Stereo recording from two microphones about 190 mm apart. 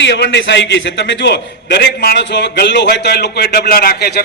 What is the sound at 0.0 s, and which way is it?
A man's voice, 70° left (ahead or behind).